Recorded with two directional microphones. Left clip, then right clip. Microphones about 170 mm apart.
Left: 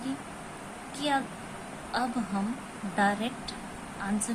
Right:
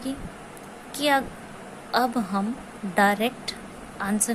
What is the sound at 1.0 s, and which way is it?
Speech, 45° right (ahead or behind).